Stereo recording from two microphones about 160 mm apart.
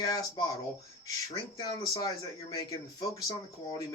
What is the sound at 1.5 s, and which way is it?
Speech, 25° left (ahead or behind).